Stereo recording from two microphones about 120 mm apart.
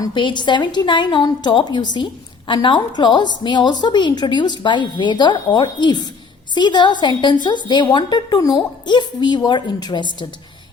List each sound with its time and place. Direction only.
0.0 s a woman's voice: 40° left (ahead or behind)